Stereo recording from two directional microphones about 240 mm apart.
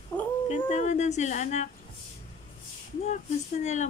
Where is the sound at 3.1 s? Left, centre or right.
Left.